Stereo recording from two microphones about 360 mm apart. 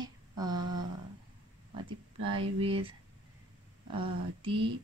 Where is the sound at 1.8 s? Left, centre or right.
Centre.